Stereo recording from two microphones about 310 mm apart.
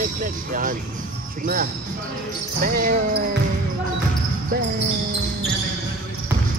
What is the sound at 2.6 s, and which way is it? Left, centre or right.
Basketball bounce, right.